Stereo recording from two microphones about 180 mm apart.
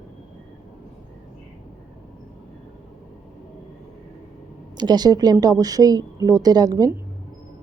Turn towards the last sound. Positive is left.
turn(degrees=-20)  # may be behind; listen again after turning